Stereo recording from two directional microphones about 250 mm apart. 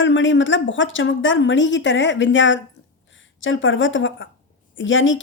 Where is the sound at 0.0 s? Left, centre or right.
Left.